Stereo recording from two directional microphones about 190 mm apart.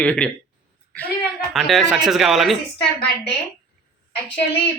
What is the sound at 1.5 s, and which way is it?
A man's voice, centre (ahead or behind).